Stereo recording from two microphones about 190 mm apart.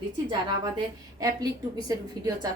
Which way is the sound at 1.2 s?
20° right (ahead or behind).